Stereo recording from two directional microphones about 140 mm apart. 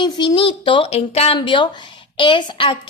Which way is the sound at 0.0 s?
35° left (ahead or behind).